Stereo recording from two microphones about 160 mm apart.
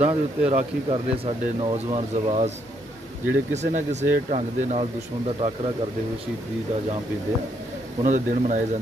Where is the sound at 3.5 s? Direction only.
45° right (ahead or behind).